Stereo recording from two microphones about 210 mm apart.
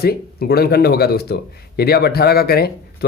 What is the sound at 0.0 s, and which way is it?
Speech, 50° left (ahead or behind).